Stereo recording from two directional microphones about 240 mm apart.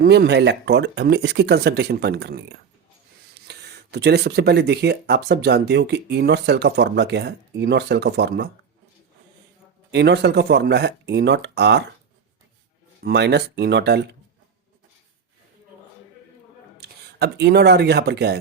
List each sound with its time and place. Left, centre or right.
0.0 s speech: right
3.4 s speech: right
9.9 s speech: right
13.0 s speech: right
16.8 s speech: right